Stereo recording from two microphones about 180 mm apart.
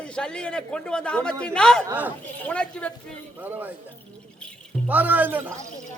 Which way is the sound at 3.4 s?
10° right (ahead or behind).